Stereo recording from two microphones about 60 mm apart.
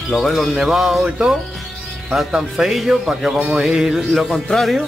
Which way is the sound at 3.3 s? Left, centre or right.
Right.